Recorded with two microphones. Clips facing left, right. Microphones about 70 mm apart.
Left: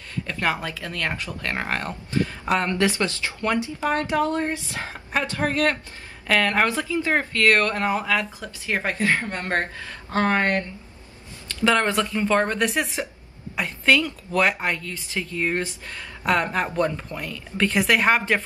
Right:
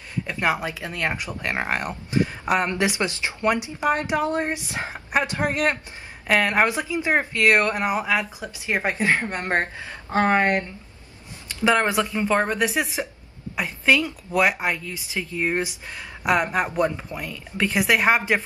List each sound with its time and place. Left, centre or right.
0.1 s speech: centre